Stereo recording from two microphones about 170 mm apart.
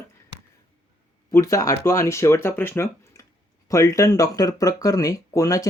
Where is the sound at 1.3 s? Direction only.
20° left (ahead or behind).